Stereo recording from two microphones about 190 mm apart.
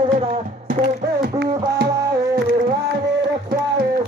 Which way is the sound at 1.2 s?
60° right (ahead or behind).